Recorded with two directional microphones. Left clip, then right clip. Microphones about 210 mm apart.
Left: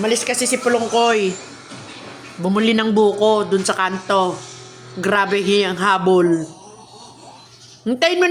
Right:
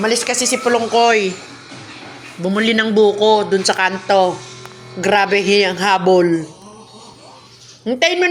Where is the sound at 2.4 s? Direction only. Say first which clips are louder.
Right 2 dB; 15° left (ahead or behind).